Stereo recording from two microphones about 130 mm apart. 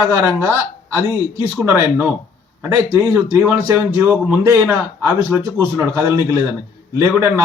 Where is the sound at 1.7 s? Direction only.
25° right (ahead or behind).